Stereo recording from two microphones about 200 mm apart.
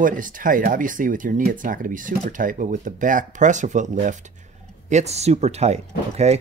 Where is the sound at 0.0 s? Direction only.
40° right (ahead or behind).